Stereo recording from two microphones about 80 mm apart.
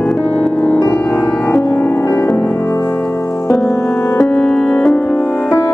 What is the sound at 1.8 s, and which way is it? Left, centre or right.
Music, left.